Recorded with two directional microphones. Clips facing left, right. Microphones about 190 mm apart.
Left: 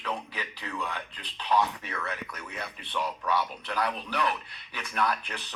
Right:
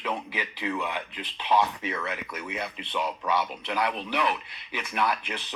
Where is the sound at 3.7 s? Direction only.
10° right (ahead or behind).